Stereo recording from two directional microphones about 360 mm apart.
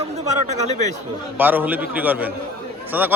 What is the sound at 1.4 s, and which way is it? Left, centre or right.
Speech, centre.